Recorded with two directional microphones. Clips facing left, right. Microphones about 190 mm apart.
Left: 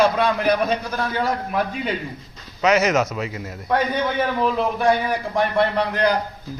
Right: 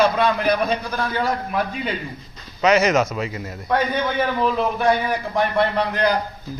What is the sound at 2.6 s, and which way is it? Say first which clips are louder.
Speech: right 1 dB; 5° left (ahead or behind).